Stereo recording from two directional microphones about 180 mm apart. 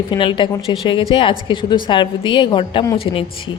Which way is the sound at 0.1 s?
25° left (ahead or behind).